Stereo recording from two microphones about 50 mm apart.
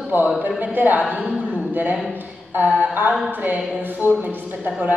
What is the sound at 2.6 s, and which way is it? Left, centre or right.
A woman's voice, right.